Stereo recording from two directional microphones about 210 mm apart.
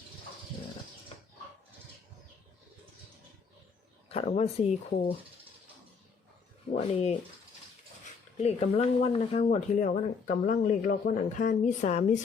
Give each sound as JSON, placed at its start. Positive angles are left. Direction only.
{"t": 4.1, "sound": "speech", "side_deg": 30}
{"t": 6.7, "sound": "speech", "side_deg": 30}
{"t": 8.4, "sound": "speech", "side_deg": 30}